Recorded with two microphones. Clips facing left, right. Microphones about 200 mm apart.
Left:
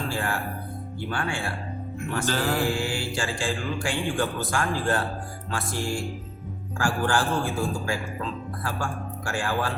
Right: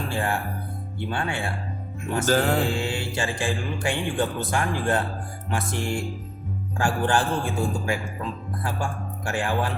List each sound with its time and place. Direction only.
0.1 s mantra: 15° right (ahead or behind)
2.2 s music: 45° right (ahead or behind)
2.6 s mantra: 20° right (ahead or behind)
5.5 s speech: 20° right (ahead or behind)